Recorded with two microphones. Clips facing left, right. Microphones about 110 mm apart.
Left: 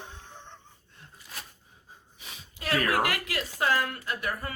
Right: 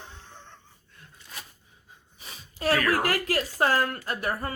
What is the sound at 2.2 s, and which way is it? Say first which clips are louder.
Speech: right 9 dB; 35° right (ahead or behind).